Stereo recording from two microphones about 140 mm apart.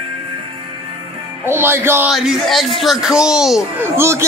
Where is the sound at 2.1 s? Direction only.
Centre (ahead or behind).